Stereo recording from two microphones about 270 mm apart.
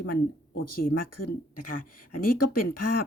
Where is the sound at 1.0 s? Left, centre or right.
Left.